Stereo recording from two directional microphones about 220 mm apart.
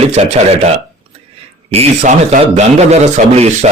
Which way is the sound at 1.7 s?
30° right (ahead or behind).